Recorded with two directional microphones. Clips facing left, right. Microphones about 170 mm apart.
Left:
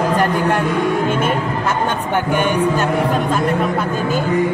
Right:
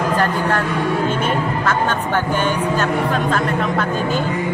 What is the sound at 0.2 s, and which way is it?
Speech, 15° left (ahead or behind).